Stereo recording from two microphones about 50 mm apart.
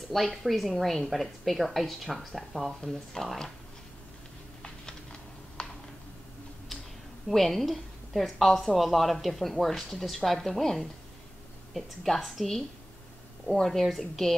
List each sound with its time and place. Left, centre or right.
0.1 s a woman's voice: centre
5.6 s a sound: centre
7.2 s a woman's voice: centre